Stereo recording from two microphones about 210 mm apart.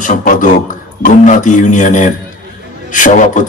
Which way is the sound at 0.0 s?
40° left (ahead or behind).